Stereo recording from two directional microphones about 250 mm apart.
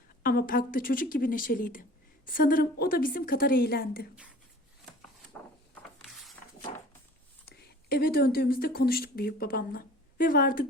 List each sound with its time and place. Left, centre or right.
0.2 s a woman's voice: left
5.3 s a sound: centre
7.4 s speech: left